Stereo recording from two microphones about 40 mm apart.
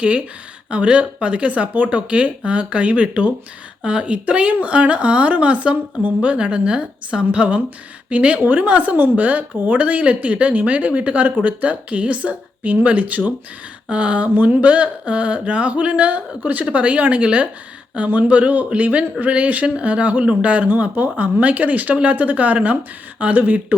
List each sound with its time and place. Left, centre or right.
0.7 s a woman's voice: right
8.4 s speech: right
8.6 s speech: right
20.7 s speech: right